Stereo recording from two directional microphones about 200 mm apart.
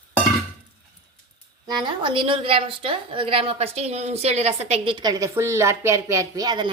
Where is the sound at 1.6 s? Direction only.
20° right (ahead or behind).